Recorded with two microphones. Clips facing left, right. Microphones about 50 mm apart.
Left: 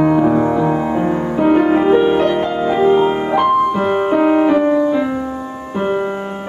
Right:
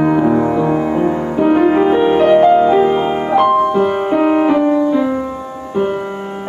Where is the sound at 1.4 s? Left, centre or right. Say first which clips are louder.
Right 1 dB; centre.